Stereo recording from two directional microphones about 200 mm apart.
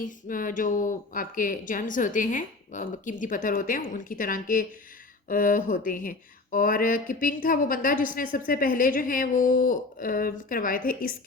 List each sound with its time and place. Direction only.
0.0 s speech: 40° left (ahead or behind)